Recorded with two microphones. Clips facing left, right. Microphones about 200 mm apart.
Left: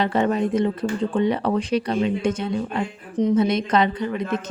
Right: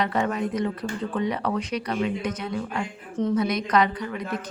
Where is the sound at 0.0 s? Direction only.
30° left (ahead or behind).